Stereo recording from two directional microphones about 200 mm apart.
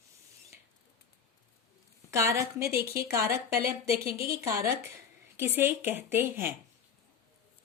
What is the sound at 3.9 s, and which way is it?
Speech, 50° right (ahead or behind).